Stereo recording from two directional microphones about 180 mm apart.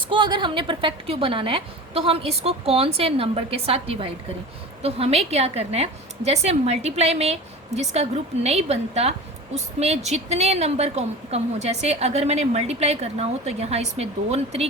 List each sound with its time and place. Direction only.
0.1 s a woman's voice: 25° right (ahead or behind)